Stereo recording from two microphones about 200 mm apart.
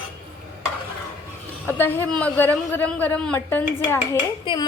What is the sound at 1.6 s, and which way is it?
Speech, 10° left (ahead or behind).